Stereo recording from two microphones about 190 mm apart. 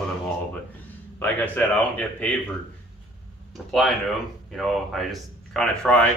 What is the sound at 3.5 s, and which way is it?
Speech, centre (ahead or behind).